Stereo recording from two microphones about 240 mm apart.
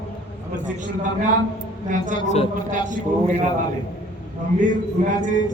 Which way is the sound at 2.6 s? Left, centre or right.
Right.